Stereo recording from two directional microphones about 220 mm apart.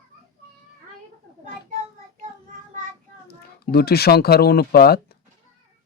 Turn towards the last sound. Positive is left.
turn(degrees=45)  # may be behind; listen again after turning